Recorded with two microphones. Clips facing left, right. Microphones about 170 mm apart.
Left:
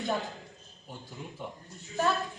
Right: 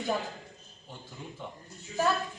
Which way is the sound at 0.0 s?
Centre (ahead or behind).